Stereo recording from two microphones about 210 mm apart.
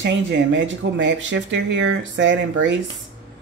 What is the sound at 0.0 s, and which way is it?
Speech, 55° right (ahead or behind).